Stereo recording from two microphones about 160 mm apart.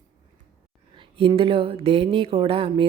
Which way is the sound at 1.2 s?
35° right (ahead or behind).